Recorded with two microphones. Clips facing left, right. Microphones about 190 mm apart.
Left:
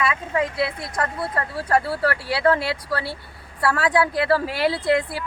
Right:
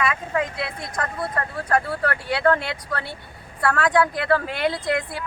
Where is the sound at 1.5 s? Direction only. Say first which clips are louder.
Left 2 dB; 30° left (ahead or behind).